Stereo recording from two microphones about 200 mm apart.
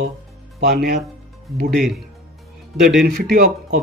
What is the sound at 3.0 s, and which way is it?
Speech, 50° right (ahead or behind).